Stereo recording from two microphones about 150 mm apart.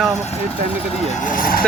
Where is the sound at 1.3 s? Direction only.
70° left (ahead or behind).